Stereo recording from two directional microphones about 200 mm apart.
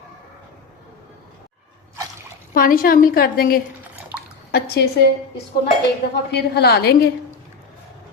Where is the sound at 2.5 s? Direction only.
45° left (ahead or behind).